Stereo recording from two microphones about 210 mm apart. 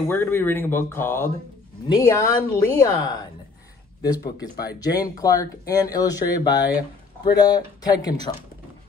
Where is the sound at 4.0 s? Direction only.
20° left (ahead or behind).